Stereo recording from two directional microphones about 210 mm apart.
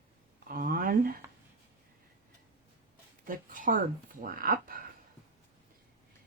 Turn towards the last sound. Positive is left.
turn(degrees=-45)  # may be behind; listen again after turning